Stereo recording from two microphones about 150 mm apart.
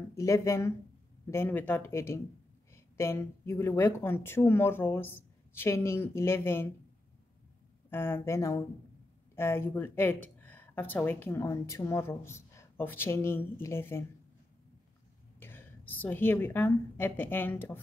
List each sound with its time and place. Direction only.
0.1 s speech: 20° left (ahead or behind)
7.9 s speech: 15° left (ahead or behind)
15.3 s a woman's voice: 15° left (ahead or behind)